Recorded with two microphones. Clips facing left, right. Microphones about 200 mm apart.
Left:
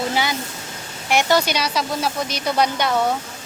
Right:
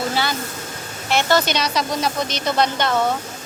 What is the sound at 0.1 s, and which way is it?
Speech, 15° left (ahead or behind).